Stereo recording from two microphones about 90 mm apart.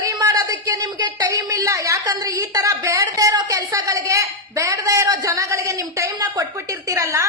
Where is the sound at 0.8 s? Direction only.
50° right (ahead or behind).